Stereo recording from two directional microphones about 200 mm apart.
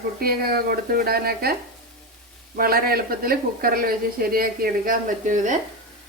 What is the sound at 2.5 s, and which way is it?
A woman's voice, 50° right (ahead or behind).